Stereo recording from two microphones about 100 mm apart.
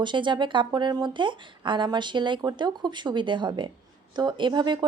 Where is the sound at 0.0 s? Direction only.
50° right (ahead or behind).